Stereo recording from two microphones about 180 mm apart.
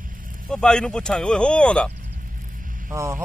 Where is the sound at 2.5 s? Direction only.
50° right (ahead or behind).